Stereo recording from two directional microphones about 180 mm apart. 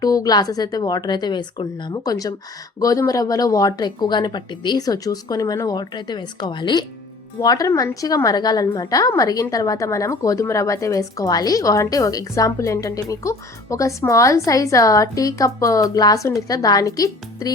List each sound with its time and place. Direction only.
0.0 s a woman's voice: 20° left (ahead or behind)